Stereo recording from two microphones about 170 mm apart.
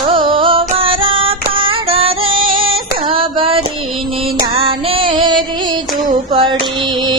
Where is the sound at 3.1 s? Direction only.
30° right (ahead or behind).